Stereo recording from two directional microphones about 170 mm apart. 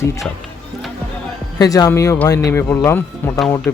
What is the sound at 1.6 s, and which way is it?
Speech, 20° left (ahead or behind).